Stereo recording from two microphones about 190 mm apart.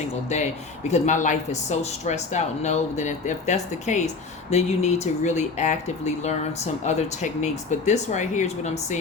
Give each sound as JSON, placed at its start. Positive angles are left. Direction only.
{"t": 0.3, "sound": "speech", "side_deg": 35}